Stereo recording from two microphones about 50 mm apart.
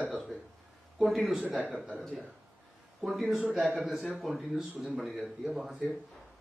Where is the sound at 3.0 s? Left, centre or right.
Centre.